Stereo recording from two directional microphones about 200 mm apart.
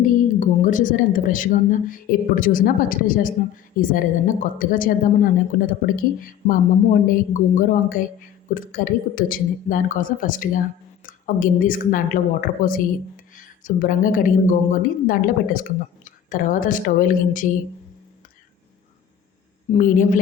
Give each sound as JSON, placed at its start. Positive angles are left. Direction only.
{"t": 0.0, "sound": "a woman's voice", "side_deg": 40}
{"t": 19.7, "sound": "a woman's voice", "side_deg": 40}